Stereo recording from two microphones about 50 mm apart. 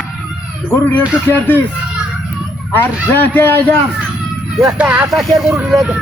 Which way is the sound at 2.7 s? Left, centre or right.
Left.